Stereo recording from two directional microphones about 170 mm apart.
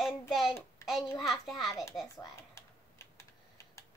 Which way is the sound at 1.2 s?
Centre (ahead or behind).